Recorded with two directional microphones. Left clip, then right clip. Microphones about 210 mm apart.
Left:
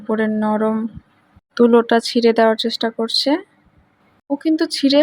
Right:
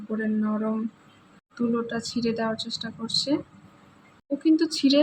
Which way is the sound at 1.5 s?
45° left (ahead or behind).